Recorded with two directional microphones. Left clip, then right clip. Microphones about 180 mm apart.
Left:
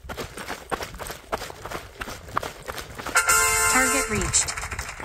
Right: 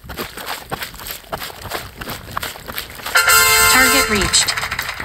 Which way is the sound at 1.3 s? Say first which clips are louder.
Right 5 dB; 50° right (ahead or behind).